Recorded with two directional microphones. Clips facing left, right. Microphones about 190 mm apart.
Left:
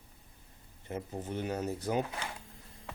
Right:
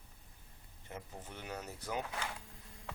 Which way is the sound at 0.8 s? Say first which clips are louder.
Left 10 dB; 35° left (ahead or behind).